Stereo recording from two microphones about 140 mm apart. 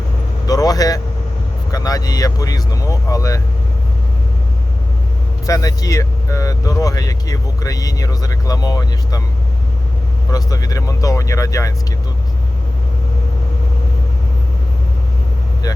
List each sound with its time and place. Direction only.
0.4 s speech: 25° left (ahead or behind)
5.5 s speech: 25° left (ahead or behind)
10.3 s speech: 25° left (ahead or behind)